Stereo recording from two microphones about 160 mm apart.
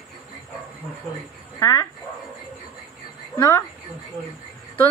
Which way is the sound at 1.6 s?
25° left (ahead or behind).